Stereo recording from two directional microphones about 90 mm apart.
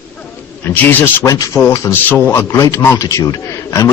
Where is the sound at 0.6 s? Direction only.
25° left (ahead or behind).